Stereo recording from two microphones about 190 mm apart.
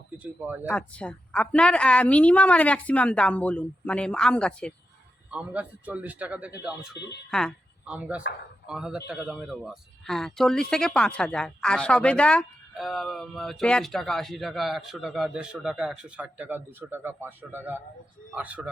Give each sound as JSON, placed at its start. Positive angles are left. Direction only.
{"t": 0.2, "sound": "a man's voice", "side_deg": -10}
{"t": 0.7, "sound": "a woman's voice", "side_deg": 5}
{"t": 5.3, "sound": "a man's voice", "side_deg": -5}
{"t": 6.9, "sound": "speech", "side_deg": 60}
{"t": 7.3, "sound": "a woman's voice", "side_deg": 5}